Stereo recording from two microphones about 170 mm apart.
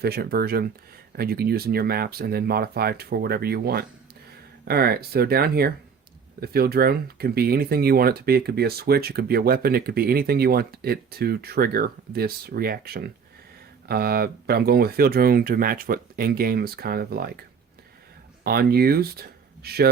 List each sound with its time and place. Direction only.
0.0 s speech: 65° right (ahead or behind)
18.4 s speech: 65° right (ahead or behind)